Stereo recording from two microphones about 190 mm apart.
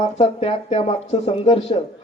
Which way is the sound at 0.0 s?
35° left (ahead or behind).